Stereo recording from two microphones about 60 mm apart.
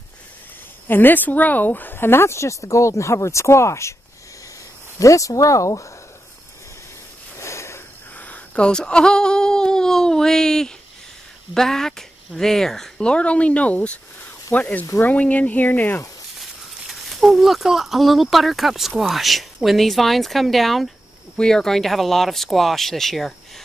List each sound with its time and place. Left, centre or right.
0.8 s speech: left
4.9 s speech: left
7.3 s a sound: left
8.5 s speech: centre
13.1 s speech: centre
16.3 s speech: centre